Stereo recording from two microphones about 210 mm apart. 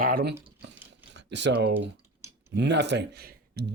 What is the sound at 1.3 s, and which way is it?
Speech, 55° right (ahead or behind).